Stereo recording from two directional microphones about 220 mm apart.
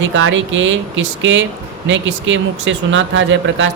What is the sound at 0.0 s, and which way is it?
Speech, 60° right (ahead or behind).